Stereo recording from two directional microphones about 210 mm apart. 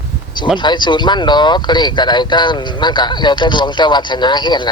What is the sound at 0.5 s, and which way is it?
Speech, 20° left (ahead or behind).